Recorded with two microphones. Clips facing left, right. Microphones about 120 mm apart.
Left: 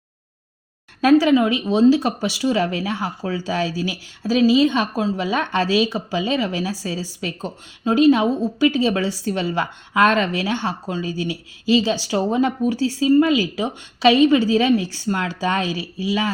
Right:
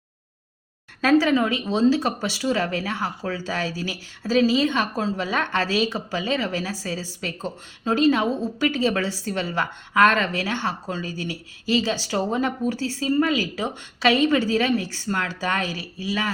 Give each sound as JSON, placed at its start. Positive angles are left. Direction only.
{"t": 1.0, "sound": "speech", "side_deg": 15}